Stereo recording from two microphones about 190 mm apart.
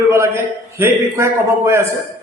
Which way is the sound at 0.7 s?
15° right (ahead or behind).